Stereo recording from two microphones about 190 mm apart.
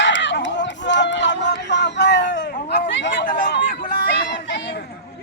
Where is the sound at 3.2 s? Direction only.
50° left (ahead or behind).